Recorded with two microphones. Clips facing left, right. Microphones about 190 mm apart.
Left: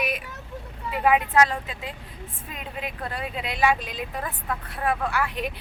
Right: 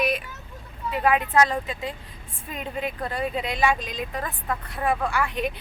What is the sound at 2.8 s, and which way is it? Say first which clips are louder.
Speech: right 4 dB; centre (ahead or behind).